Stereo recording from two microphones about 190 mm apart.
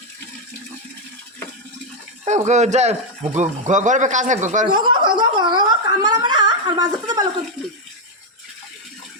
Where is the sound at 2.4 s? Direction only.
40° right (ahead or behind).